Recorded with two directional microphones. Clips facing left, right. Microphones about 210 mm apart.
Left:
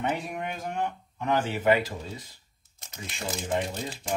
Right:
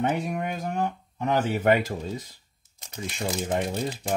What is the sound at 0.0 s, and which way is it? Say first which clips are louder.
Speech: right 4 dB; 45° right (ahead or behind).